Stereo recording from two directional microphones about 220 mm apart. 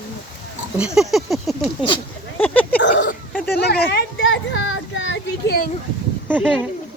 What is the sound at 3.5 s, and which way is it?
A child's voice, 45° left (ahead or behind).